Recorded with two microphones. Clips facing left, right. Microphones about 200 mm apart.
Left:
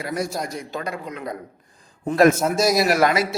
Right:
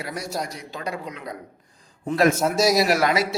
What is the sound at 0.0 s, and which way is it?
Speech, 50° left (ahead or behind).